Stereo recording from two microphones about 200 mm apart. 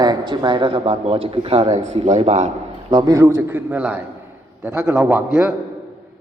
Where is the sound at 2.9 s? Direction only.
20° right (ahead or behind).